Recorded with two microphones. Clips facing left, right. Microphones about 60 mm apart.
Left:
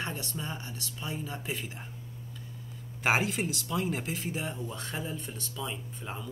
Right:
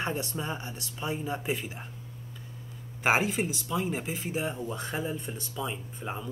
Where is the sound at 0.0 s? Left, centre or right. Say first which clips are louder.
Right 4 dB; right.